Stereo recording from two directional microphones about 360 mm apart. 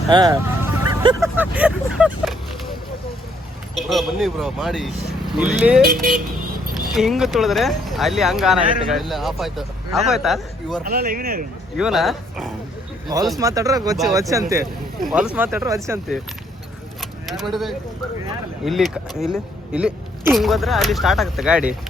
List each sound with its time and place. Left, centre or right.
0.1 s speech: centre
3.8 s speech: centre
5.8 s speech: right
6.9 s speech: centre
10.8 s speech: right
11.8 s speech: centre
17.0 s vehicle: centre
18.6 s speech: centre